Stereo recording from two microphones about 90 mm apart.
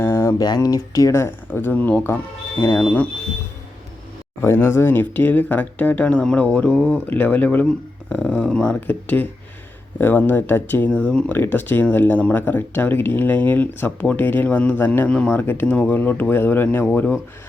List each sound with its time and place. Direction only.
0.0 s a sound: 30° left (ahead or behind)
0.3 s speech: 45° left (ahead or behind); by 2.0 s 20° left (ahead or behind)
2.6 s speech: 30° left (ahead or behind)
4.4 s speech: 25° left (ahead or behind)